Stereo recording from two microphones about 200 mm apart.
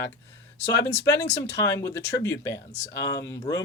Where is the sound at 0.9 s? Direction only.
15° left (ahead or behind).